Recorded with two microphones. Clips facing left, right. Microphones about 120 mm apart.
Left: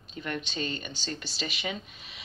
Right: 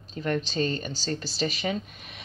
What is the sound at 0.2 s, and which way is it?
A woman's voice, 40° right (ahead or behind).